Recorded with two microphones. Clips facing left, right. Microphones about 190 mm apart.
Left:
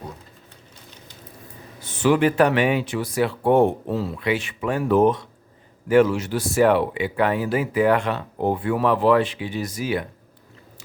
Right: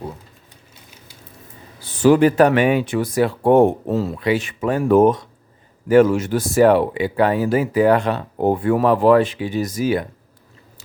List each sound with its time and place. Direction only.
1.8 s speech: 35° right (ahead or behind)